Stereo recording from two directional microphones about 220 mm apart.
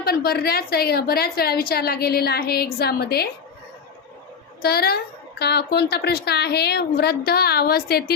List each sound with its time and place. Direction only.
0.0 s a woman's voice: 45° left (ahead or behind)
4.6 s a woman's voice: 45° left (ahead or behind)